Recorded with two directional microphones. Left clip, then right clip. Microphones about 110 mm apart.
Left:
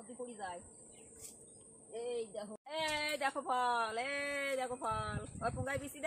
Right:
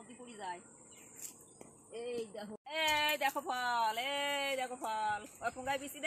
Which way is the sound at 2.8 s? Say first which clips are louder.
Right 5 dB; 20° left (ahead or behind).